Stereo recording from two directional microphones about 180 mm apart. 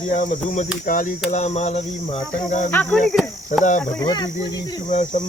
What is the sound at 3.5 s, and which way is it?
Speech, 45° left (ahead or behind).